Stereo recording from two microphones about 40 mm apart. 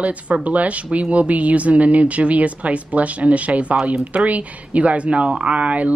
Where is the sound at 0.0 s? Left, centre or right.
Right.